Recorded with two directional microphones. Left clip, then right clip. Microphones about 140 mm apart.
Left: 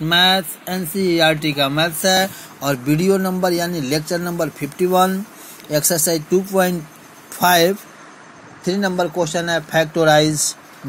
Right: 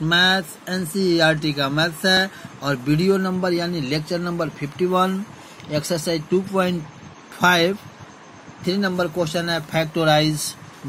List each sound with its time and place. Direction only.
0.1 s speech: 30° left (ahead or behind)
7.3 s speech: 40° left (ahead or behind)